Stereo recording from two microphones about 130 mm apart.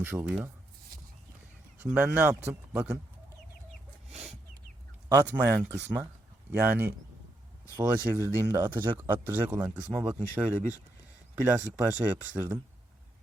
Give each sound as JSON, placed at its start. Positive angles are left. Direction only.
{"t": 0.0, "sound": "speech", "side_deg": -15}
{"t": 1.8, "sound": "speech", "side_deg": -10}
{"t": 5.0, "sound": "speech", "side_deg": -20}